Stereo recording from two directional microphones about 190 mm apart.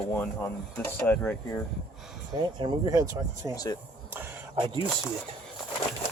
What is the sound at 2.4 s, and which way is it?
Speech, 25° right (ahead or behind).